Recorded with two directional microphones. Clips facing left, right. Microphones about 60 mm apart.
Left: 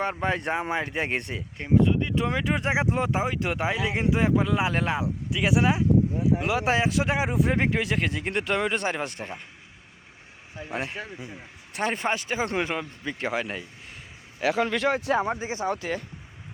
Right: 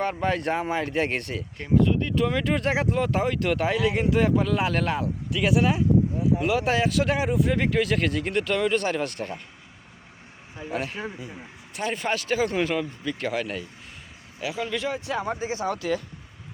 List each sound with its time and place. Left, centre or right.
0.0 s speech: centre
10.6 s speech: centre
11.7 s speech: left
14.4 s speech: left
15.4 s speech: centre